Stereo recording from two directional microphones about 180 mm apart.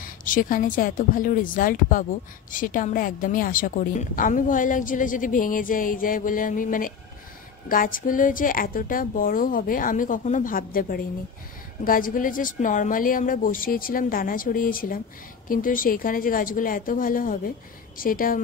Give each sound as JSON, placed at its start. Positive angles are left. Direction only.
{"t": 0.0, "sound": "speech", "side_deg": 50}